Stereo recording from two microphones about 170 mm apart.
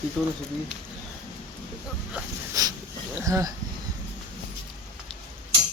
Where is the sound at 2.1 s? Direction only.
20° right (ahead or behind).